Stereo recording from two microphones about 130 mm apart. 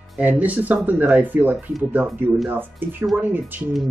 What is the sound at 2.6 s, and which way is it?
Speech, 15° right (ahead or behind).